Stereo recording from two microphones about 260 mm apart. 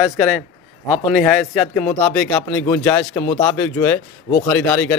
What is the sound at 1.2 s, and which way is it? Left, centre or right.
Speech, centre.